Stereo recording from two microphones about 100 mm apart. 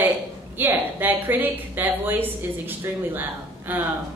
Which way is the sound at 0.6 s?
20° right (ahead or behind).